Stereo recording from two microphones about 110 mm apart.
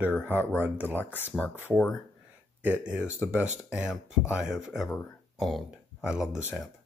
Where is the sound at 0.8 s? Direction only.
15° left (ahead or behind).